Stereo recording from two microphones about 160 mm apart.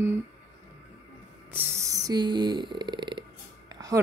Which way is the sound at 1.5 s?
20° right (ahead or behind).